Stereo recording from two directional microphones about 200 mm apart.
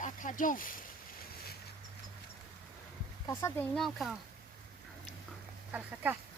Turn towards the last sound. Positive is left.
turn(degrees=-10)  # may be behind; listen again after turning